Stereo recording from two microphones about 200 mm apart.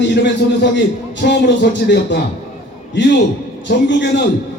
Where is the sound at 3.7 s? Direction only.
60° left (ahead or behind).